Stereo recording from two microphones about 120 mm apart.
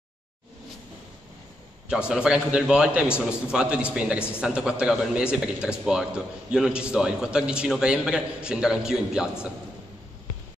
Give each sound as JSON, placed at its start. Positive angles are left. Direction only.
{"t": 2.0, "sound": "a man's voice", "side_deg": -5}